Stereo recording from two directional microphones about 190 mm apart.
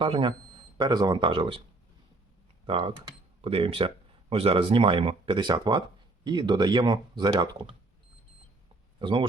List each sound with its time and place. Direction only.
0.0 s speech: 25° right (ahead or behind)
2.6 s speech: 25° right (ahead or behind)
9.0 s speech: 25° right (ahead or behind)